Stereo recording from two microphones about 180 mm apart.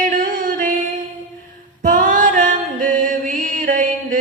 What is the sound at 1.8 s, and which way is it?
Music, 50° right (ahead or behind).